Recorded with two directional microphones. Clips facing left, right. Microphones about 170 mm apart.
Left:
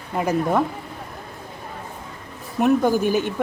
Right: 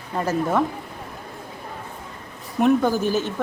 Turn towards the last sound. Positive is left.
turn(degrees=15)  # may be behind; listen again after turning